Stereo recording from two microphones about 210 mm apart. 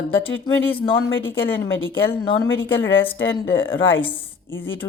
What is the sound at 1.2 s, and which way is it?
Speech, 10° left (ahead or behind).